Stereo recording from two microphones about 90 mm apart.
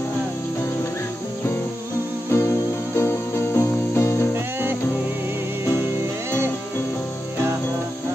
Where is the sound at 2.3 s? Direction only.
30° left (ahead or behind).